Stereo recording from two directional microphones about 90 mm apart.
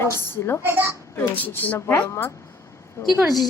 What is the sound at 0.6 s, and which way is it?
Speech, 30° right (ahead or behind).